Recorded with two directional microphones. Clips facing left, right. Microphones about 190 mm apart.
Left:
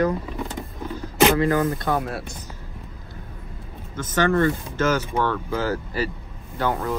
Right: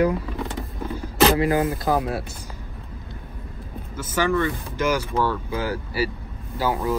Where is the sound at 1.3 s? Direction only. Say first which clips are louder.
Even; 15° right (ahead or behind).